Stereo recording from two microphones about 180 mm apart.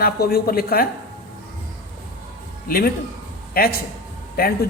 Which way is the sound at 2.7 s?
55° left (ahead or behind).